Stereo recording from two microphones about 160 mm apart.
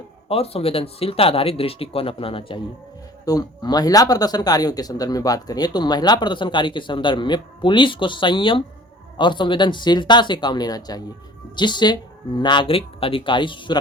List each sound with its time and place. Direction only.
0.3 s speech: 40° left (ahead or behind)
3.2 s speech: 25° left (ahead or behind)